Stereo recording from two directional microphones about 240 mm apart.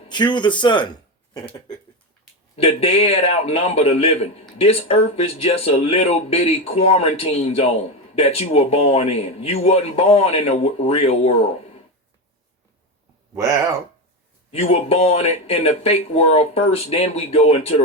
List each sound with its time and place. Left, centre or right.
0.1 s speech: centre
2.8 s speech: left
14.5 s speech: left